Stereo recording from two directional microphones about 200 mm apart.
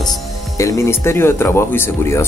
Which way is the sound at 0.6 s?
15° left (ahead or behind).